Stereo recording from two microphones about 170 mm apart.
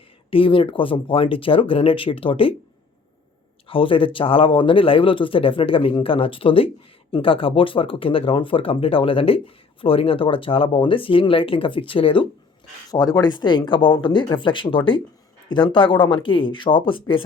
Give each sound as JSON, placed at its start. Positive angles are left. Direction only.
{"t": 0.3, "sound": "speech", "side_deg": 30}
{"t": 3.7, "sound": "speech", "side_deg": 30}